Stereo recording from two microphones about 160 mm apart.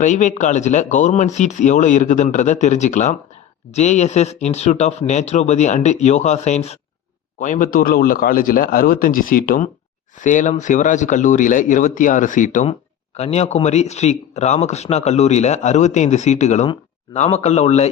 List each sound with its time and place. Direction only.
0.0 s a man's voice: 50° left (ahead or behind)
13.1 s speech: 40° left (ahead or behind)